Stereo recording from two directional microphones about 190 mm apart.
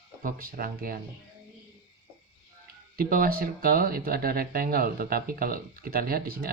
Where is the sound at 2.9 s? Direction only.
50° right (ahead or behind).